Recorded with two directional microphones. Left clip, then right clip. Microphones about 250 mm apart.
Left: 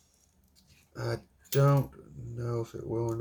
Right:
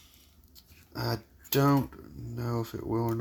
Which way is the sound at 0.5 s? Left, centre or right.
Right.